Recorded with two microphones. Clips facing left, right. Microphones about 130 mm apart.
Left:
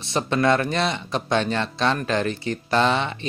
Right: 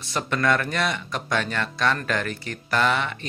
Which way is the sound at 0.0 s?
25° left (ahead or behind).